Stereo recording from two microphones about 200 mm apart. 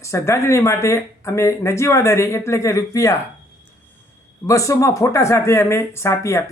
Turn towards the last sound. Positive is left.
turn(degrees=15)  # may be behind; listen again after turning